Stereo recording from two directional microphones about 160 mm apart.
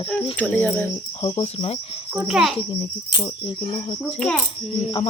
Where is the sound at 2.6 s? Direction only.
30° left (ahead or behind).